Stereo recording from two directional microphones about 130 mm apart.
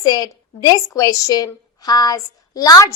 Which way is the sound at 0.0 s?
30° left (ahead or behind).